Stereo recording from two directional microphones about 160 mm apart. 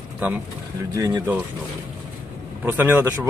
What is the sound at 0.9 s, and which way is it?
Speech, 20° right (ahead or behind).